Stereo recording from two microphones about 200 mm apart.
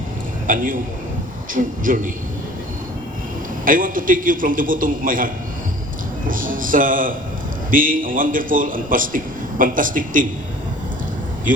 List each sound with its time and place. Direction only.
0.4 s a man's voice: 40° right (ahead or behind)
3.7 s a man's voice: 45° right (ahead or behind)